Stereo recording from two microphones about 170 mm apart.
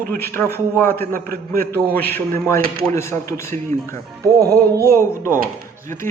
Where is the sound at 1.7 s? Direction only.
10° left (ahead or behind).